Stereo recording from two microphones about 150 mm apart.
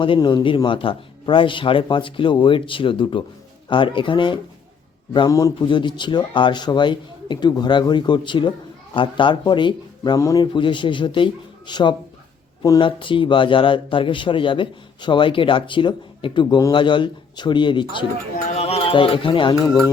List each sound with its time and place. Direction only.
0.0 s speech: 35° left (ahead or behind)
18.3 s speech: 50° left (ahead or behind); by 19.7 s 30° left (ahead or behind)